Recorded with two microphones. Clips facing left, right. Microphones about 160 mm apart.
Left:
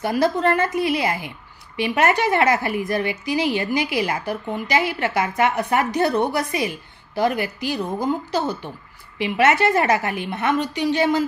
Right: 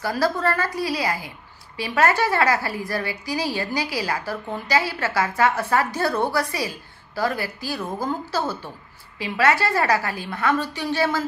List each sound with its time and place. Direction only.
0.0 s a woman's voice: 20° left (ahead or behind)